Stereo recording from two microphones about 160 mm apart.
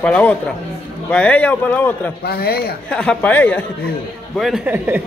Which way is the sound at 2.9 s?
5° left (ahead or behind).